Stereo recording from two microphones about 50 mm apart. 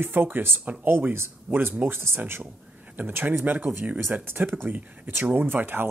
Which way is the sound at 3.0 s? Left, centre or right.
Right.